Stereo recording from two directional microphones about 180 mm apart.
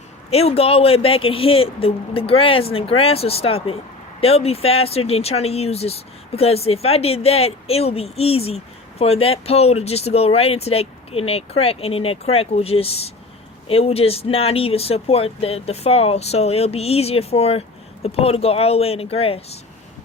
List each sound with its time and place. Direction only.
0.3 s speech: 35° left (ahead or behind)